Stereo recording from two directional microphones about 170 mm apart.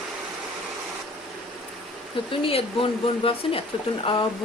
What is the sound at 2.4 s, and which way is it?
Speech, 35° left (ahead or behind).